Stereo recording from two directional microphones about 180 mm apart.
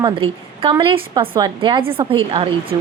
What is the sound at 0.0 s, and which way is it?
A woman's voice, 30° right (ahead or behind).